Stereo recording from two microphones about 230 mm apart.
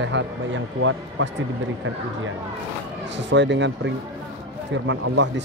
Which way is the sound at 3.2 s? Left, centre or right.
Right.